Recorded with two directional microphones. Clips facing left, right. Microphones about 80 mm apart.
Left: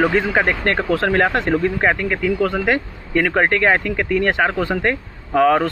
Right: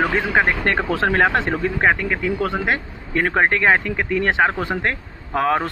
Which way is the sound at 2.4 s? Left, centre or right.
Centre.